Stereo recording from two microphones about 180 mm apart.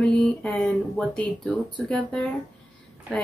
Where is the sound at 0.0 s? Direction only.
5° left (ahead or behind).